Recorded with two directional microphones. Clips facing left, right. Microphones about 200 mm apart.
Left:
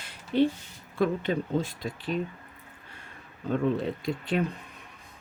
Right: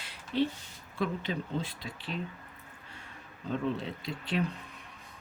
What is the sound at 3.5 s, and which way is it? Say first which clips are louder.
Speech: left 6 dB; 50° left (ahead or behind).